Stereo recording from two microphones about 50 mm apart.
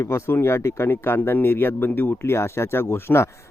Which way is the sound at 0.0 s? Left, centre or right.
Left.